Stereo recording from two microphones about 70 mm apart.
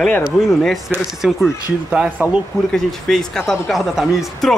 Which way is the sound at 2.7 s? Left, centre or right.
Centre.